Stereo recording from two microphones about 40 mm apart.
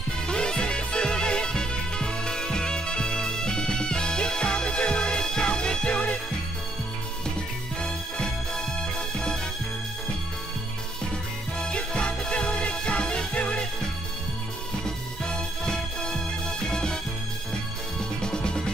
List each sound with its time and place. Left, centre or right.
0.3 s music: left
7.8 s music: left
11.6 s music: left
15.2 s music: left
18.2 s music: left